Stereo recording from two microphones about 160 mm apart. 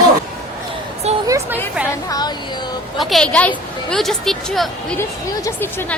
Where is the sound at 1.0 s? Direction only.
40° right (ahead or behind).